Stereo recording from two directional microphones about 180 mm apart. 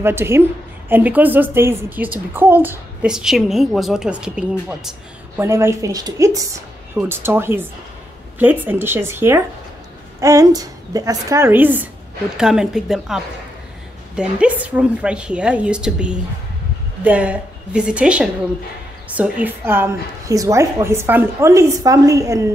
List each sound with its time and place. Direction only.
0.0 s a woman's voice: 15° right (ahead or behind)
5.4 s a woman's voice: 15° right (ahead or behind)